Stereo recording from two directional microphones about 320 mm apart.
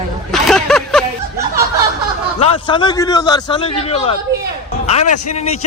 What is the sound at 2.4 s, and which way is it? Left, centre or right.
A man's voice, centre.